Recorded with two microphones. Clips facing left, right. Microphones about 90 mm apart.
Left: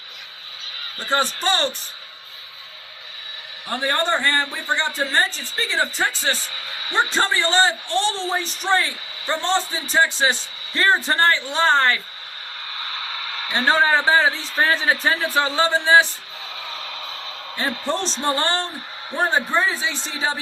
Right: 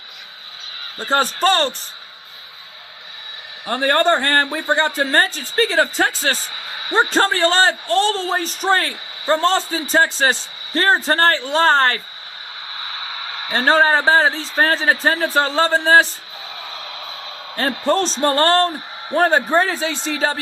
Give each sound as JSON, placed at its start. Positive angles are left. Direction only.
{"t": 0.9, "sound": "a man's voice", "side_deg": -35}
{"t": 1.2, "sound": "a man's voice", "side_deg": -45}
{"t": 3.7, "sound": "a man's voice", "side_deg": -70}
{"t": 4.6, "sound": "a man's voice", "side_deg": -45}
{"t": 13.5, "sound": "a man's voice", "side_deg": -40}
{"t": 17.5, "sound": "a man's voice", "side_deg": -50}
{"t": 19.1, "sound": "a man's voice", "side_deg": -60}
{"t": 20.1, "sound": "a man's voice", "side_deg": -55}